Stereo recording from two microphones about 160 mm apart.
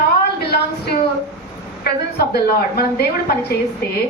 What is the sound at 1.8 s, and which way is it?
A woman's voice, 80° left.